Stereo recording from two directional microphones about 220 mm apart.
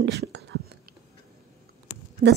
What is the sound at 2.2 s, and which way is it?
Speech, 45° right (ahead or behind).